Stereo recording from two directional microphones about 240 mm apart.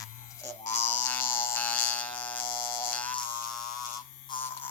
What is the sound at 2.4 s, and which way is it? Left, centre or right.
Electric shaver, left.